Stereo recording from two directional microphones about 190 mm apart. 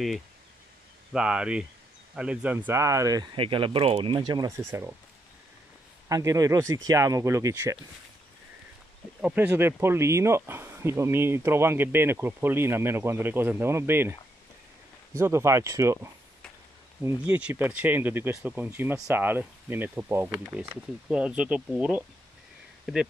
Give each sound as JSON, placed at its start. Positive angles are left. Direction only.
{"t": 1.1, "sound": "speech", "side_deg": -5}
{"t": 6.0, "sound": "speech", "side_deg": -20}
{"t": 9.2, "sound": "speech", "side_deg": -10}
{"t": 15.1, "sound": "speech", "side_deg": -15}